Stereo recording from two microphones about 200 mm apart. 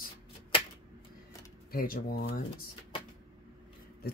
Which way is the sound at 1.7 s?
50° left (ahead or behind).